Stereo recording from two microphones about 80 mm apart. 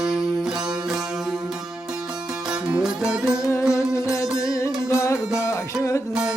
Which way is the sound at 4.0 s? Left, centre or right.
Left.